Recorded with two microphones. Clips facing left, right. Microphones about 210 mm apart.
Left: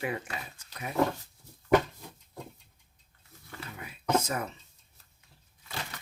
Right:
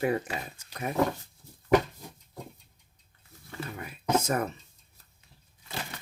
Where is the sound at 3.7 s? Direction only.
45° right (ahead or behind).